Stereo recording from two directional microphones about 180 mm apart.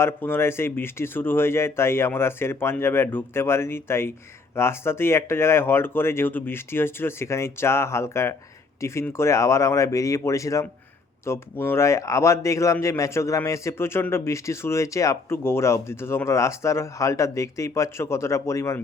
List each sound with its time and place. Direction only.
0.0 s a man's voice: 10° left (ahead or behind)